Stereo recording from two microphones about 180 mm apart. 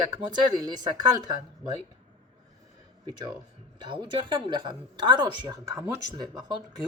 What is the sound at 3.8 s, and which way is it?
A woman's voice, 25° right (ahead or behind).